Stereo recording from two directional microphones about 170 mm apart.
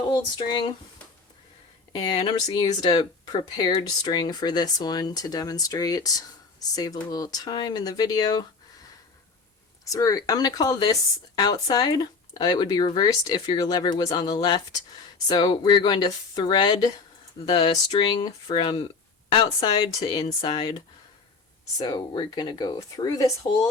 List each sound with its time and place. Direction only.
0.1 s speech: 25° left (ahead or behind)
2.2 s speech: 25° left (ahead or behind)
9.8 s speech: 20° left (ahead or behind)
21.8 s speech: 25° left (ahead or behind)